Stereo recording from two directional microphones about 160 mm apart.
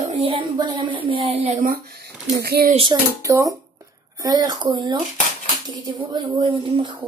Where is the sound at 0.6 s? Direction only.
30° right (ahead or behind); by 2.7 s 80° right.